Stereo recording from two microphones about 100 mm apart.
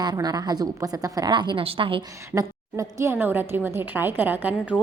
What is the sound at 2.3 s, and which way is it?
A woman's voice, 35° right (ahead or behind).